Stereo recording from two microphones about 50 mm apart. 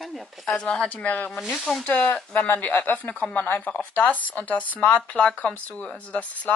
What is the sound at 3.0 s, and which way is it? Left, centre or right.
Speech, left.